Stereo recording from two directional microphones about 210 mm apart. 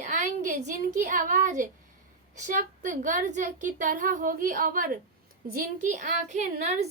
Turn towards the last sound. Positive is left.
turn(degrees=-35)  # may be behind; listen again after turning